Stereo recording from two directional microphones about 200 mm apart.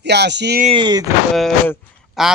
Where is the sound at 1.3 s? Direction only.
Centre (ahead or behind).